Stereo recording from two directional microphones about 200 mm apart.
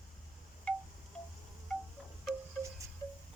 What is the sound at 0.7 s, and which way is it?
Chime, 5° left (ahead or behind).